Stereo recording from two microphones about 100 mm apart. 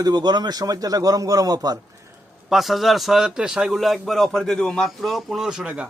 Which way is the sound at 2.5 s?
Centre (ahead or behind).